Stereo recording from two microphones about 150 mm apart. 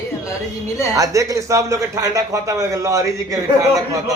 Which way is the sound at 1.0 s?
20° right (ahead or behind).